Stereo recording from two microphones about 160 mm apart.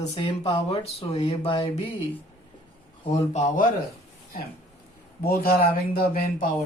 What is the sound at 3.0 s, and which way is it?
Speech, 45° left (ahead or behind).